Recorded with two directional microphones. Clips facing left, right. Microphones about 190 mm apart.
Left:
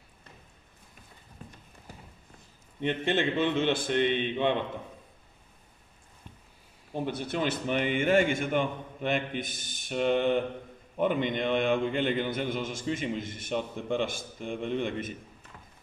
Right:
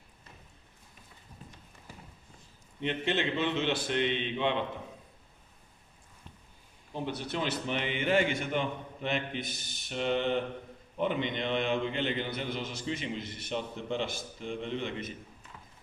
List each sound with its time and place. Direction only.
2.8 s a man's voice: 50° left (ahead or behind)
6.9 s a man's voice: 50° left (ahead or behind)